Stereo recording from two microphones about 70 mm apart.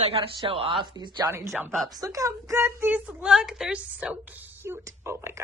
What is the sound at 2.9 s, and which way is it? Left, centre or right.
Speech, right.